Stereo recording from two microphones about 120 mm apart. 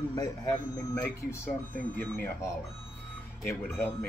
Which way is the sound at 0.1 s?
30° left (ahead or behind).